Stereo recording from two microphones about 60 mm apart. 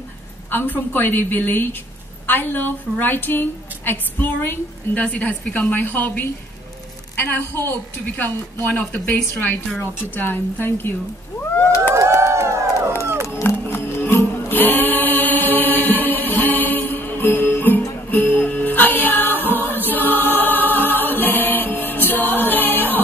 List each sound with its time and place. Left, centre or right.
0.5 s a woman's voice: left
4.9 s a woman's voice: left
8.7 s a woman's voice: left
11.9 s a sound: right
13.0 s music: right
13.3 s music: left